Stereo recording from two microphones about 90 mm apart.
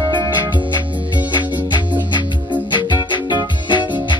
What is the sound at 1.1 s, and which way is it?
Music, 60° left (ahead or behind).